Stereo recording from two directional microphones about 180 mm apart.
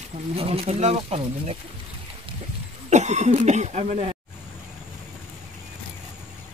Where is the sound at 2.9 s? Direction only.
40° right (ahead or behind).